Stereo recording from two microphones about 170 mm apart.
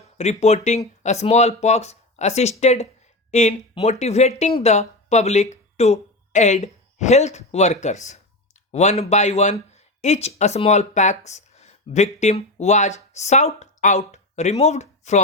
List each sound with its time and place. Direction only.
0.2 s speech: 40° left (ahead or behind)